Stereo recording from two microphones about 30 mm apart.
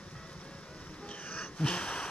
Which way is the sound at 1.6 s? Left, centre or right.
Left.